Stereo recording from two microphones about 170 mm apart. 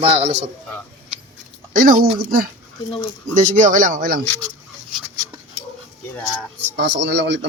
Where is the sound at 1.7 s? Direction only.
50° right (ahead or behind).